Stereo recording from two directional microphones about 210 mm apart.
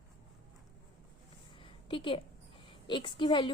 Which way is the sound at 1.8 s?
25° left (ahead or behind).